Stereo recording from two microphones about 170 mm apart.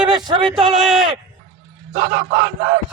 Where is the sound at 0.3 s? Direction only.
30° right (ahead or behind).